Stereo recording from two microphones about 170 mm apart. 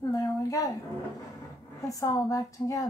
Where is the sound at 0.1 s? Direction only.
20° left (ahead or behind).